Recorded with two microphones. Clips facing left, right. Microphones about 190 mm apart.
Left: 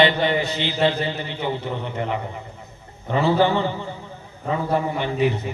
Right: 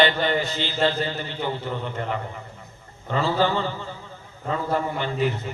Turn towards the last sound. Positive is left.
turn(degrees=15)  # may be behind; listen again after turning